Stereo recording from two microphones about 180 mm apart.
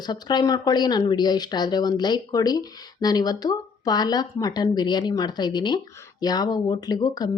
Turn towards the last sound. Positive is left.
turn(degrees=20)  # may be behind; listen again after turning